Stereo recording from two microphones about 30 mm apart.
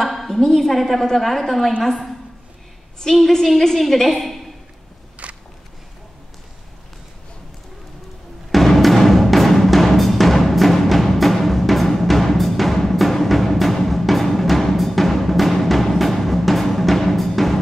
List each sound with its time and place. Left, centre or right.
0.0 s a woman's voice: centre
3.7 s a woman's voice: centre
5.2 s a sound: right
8.5 s music: centre